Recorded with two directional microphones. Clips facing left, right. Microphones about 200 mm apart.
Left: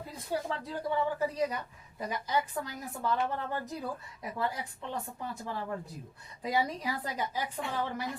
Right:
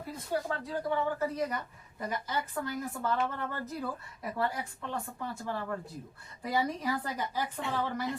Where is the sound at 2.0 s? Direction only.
15° left (ahead or behind).